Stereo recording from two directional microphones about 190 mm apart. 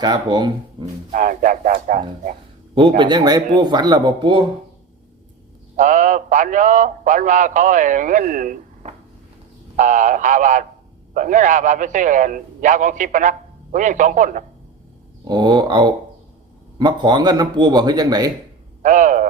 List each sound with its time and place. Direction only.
0.0 s speech: 20° right (ahead or behind)
1.1 s speech: 45° right (ahead or behind)
3.0 s speech: 20° right (ahead or behind)
5.7 s a man's voice: 40° right (ahead or behind)
15.2 s speech: 25° right (ahead or behind)
18.8 s speech: 40° right (ahead or behind)